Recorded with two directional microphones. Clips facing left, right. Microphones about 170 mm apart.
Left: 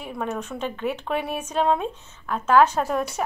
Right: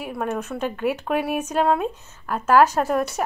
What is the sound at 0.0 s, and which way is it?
A woman's voice, 5° right (ahead or behind).